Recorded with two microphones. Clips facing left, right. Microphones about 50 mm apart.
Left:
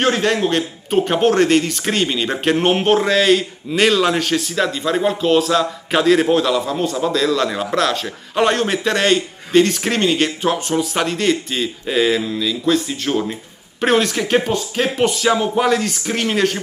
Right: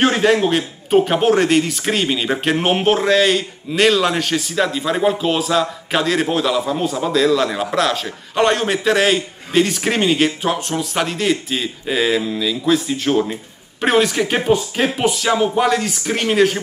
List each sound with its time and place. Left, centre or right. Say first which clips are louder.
0.0 s a man's voice: right 2 dB; centre